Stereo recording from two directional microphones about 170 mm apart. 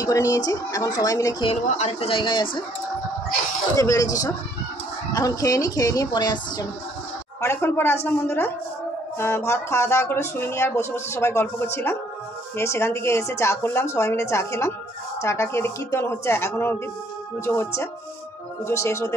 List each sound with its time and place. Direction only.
0.0 s speech: 20° left (ahead or behind)
1.5 s a woman's voice: 40° left (ahead or behind)
3.7 s speech: 20° left (ahead or behind)
7.4 s speech: 15° left (ahead or behind)